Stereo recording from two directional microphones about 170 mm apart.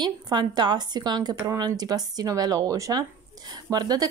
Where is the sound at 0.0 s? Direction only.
25° right (ahead or behind).